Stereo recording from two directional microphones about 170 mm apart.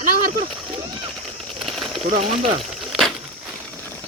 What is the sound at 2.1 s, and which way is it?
Speech, 40° right (ahead or behind).